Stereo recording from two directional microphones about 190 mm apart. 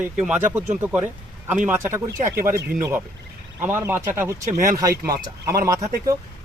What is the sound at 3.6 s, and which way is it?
Speech, 10° right (ahead or behind).